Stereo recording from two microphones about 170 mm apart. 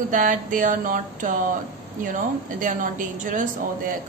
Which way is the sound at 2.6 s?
50° right (ahead or behind).